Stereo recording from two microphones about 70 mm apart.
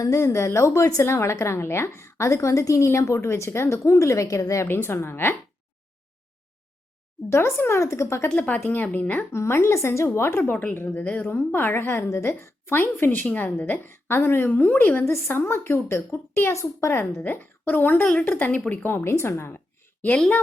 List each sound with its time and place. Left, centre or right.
0.0 s a woman's voice: left
4.7 s a woman's voice: left
7.3 s a woman's voice: left
8.3 s a woman's voice: left
16.5 s a woman's voice: left
18.0 s a woman's voice: centre
18.3 s a woman's voice: left